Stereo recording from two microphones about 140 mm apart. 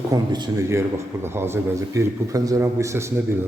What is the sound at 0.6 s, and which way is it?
A man's voice, 20° right (ahead or behind).